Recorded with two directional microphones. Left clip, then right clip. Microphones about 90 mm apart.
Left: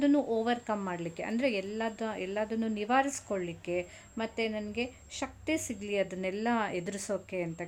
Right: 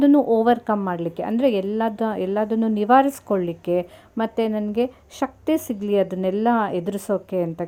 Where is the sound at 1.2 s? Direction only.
30° right (ahead or behind).